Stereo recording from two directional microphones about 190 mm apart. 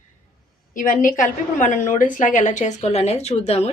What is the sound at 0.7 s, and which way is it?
A woman's voice, 45° left (ahead or behind).